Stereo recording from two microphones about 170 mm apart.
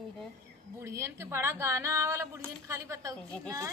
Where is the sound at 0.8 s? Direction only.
15° right (ahead or behind).